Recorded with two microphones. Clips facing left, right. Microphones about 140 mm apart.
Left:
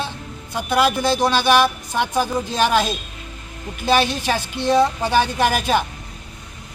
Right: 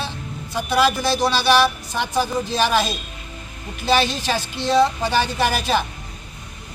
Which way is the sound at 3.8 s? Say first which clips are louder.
Left 1 dB; 15° left (ahead or behind).